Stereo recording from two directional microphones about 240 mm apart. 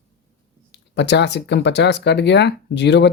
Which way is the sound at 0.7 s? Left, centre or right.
Left.